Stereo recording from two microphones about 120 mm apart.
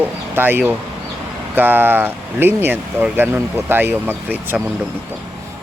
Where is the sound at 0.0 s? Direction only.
15° right (ahead or behind).